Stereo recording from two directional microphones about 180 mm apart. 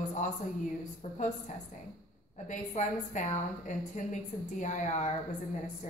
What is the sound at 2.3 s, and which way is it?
A woman's voice, 45° left (ahead or behind).